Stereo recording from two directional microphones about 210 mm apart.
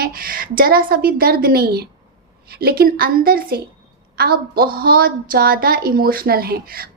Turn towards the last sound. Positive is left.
turn(degrees=-45)  # may be behind; listen again after turning